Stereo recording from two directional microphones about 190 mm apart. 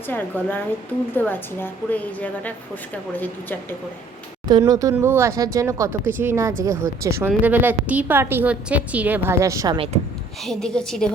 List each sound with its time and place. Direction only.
0.1 s a woman's voice: 10° left (ahead or behind)
4.4 s a woman's voice: 20° right (ahead or behind)
9.7 s speech: 30° right (ahead or behind)
10.4 s a woman's voice: centre (ahead or behind)